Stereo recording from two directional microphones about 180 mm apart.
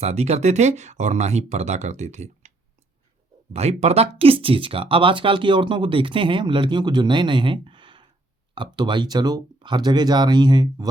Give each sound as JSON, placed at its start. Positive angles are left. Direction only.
{"t": 0.0, "sound": "speech", "side_deg": -35}
{"t": 3.5, "sound": "speech", "side_deg": -35}